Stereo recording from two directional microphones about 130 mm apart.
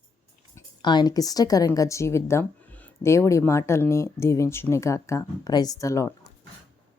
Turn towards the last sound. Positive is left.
turn(degrees=25)  # may be behind; listen again after turning